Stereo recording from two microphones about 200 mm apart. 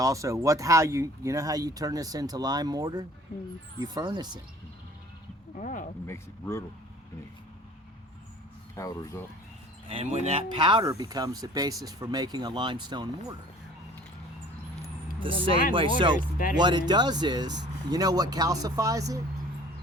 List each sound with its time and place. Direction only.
0.0 s speech: 15° right (ahead or behind)
5.5 s speech: 40° left (ahead or behind)
6.1 s speech: 15° left (ahead or behind)
8.7 s speech: 15° left (ahead or behind)
9.9 s speech: 30° right (ahead or behind)
15.2 s speech: 25° right (ahead or behind)